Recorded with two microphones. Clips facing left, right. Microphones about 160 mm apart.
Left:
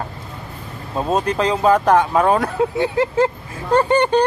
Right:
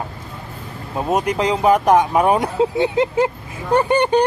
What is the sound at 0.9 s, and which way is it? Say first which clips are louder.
Speech: even; 15° right (ahead or behind).